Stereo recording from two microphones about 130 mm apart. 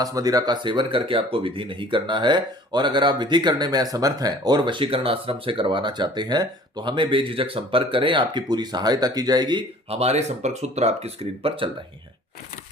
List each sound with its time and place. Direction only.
0.0 s speech: 30° right (ahead or behind)
9.9 s speech: 55° right (ahead or behind)